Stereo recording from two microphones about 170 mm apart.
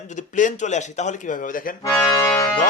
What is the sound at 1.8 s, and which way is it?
Accordion, 15° left (ahead or behind).